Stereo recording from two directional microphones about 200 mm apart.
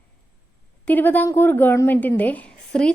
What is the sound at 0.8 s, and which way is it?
A woman's voice, 10° left (ahead or behind).